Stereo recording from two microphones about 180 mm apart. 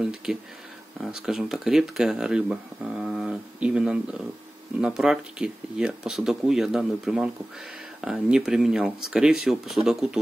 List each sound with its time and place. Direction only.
0.0 s speech: centre (ahead or behind)